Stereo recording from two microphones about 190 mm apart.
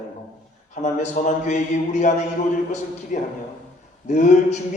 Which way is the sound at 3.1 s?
40° left (ahead or behind).